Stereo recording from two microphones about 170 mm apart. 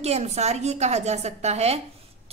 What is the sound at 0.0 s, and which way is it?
A woman's voice, 40° right (ahead or behind).